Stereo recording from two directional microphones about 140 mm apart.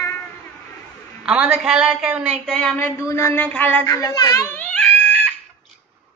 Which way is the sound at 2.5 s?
10° left (ahead or behind).